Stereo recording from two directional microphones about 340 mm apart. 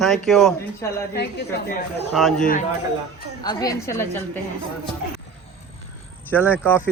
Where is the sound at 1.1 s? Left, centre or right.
Left.